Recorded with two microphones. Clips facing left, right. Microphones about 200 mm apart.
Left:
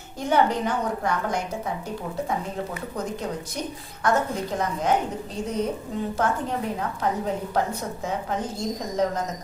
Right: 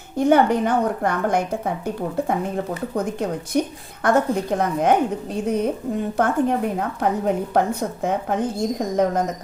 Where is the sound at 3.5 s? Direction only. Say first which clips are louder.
Right 10 dB; 55° right (ahead or behind).